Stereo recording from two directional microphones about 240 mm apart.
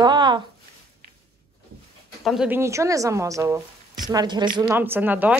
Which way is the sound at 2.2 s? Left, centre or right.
Centre.